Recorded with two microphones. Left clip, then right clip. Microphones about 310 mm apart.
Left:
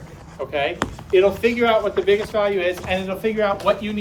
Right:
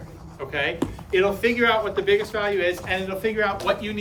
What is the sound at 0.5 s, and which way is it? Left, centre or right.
A man's voice, centre.